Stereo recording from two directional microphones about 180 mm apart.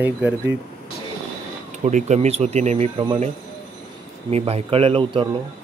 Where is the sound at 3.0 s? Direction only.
25° right (ahead or behind).